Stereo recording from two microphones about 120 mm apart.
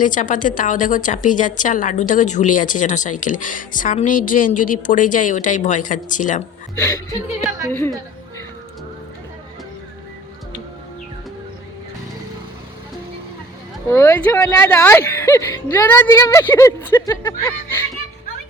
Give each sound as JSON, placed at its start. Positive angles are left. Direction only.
{"t": 0.0, "sound": "a woman's voice", "side_deg": 90}
{"t": 6.7, "sound": "speech", "side_deg": 30}
{"t": 13.8, "sound": "a woman's voice", "side_deg": 25}